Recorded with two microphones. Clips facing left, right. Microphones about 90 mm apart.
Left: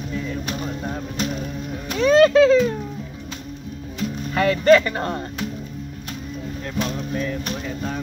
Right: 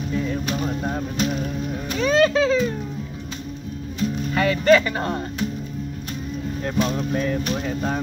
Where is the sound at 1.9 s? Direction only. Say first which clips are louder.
Left 4 dB; 55° left (ahead or behind).